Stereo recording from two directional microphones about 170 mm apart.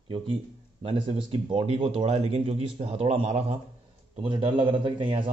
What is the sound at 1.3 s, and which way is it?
A man's voice, 35° right (ahead or behind).